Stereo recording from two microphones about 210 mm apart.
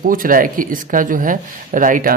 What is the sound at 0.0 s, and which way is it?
Speech, 40° right (ahead or behind).